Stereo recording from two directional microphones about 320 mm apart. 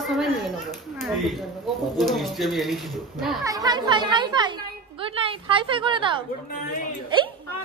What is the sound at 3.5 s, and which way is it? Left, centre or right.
Speech, centre.